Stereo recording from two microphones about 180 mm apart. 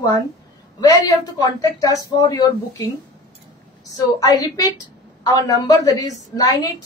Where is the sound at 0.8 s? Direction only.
20° left (ahead or behind).